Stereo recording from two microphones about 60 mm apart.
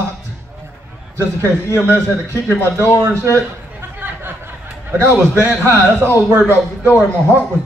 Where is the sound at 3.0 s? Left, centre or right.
Right.